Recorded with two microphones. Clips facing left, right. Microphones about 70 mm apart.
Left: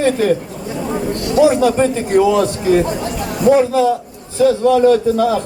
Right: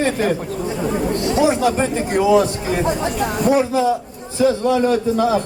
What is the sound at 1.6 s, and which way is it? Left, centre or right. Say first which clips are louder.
A man's voice: left 4 dB; centre.